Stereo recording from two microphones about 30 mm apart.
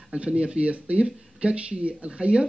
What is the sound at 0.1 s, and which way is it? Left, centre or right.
Speech, right.